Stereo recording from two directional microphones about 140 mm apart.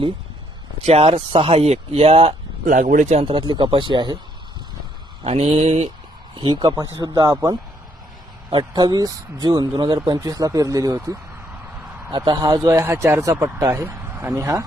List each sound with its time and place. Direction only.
0.9 s speech: 45° right (ahead or behind)
2.6 s speech: 65° right (ahead or behind); by 4.2 s 35° right (ahead or behind)
5.2 s speech: 50° right (ahead or behind)
6.3 s speech: 35° right (ahead or behind)